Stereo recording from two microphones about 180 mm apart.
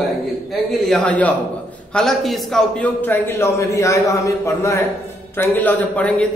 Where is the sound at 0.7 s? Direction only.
5° left (ahead or behind).